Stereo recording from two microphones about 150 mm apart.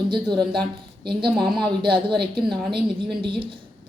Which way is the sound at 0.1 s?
30° right (ahead or behind).